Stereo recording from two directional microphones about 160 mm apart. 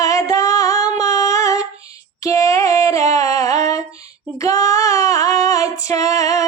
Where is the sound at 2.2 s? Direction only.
20° left (ahead or behind).